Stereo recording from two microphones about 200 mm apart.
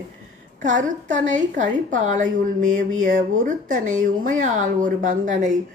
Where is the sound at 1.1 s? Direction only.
40° right (ahead or behind).